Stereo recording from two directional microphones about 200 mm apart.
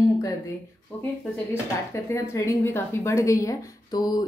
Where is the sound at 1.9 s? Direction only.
15° left (ahead or behind).